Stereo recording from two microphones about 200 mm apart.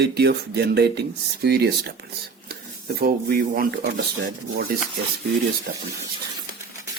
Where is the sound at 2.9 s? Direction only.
50° right (ahead or behind).